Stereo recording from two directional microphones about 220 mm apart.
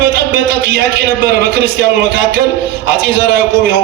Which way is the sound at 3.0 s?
45° right (ahead or behind).